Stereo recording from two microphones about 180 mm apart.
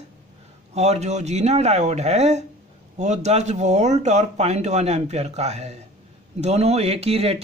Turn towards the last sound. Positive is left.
turn(degrees=-35)  # may be behind; listen again after turning